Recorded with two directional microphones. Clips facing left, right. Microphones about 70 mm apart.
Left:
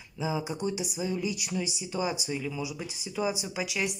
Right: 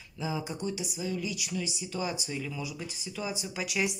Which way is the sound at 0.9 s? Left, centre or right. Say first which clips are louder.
Left 3 dB; left.